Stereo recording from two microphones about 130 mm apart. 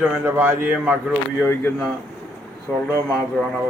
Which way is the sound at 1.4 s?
15° left (ahead or behind).